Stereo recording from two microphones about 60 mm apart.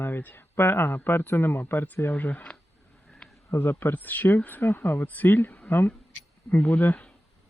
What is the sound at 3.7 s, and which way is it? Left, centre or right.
Speech, left.